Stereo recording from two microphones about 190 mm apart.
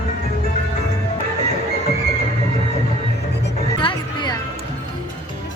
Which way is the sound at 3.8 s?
25° left (ahead or behind).